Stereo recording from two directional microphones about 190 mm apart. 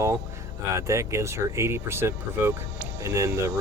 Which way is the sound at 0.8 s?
15° right (ahead or behind).